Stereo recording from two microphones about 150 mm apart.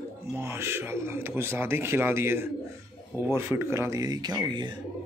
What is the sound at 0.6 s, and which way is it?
Speech, 15° right (ahead or behind).